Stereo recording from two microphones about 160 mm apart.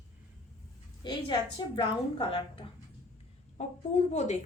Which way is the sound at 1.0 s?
30° left (ahead or behind).